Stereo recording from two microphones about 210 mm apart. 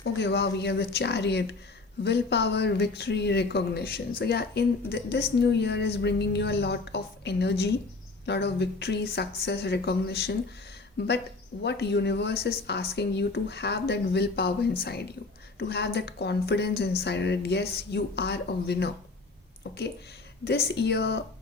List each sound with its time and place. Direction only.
0.0 s a woman's voice: 55° left (ahead or behind)
20.7 s a woman's voice: 55° left (ahead or behind)